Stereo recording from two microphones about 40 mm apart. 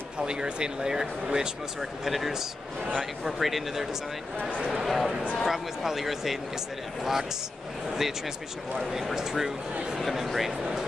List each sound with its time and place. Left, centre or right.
0.2 s speech: right
2.0 s speech: centre
4.4 s a man's voice: left
4.8 s speech: centre
9.1 s speech: centre